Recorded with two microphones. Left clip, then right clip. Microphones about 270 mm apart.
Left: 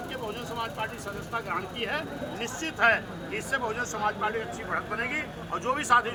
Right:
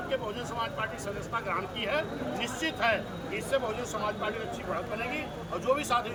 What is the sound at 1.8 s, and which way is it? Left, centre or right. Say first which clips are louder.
Speech: right 1 dB; centre.